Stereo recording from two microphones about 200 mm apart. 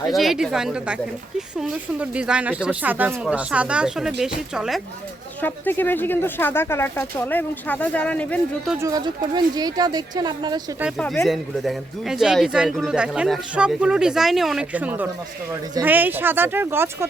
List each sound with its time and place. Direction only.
0.1 s speech: centre (ahead or behind)
5.4 s speech: 10° left (ahead or behind)
8.8 s speech: 20° right (ahead or behind)
10.8 s speech: 5° right (ahead or behind)